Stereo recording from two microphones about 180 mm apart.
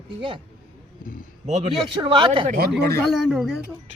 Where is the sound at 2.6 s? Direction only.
60° right (ahead or behind).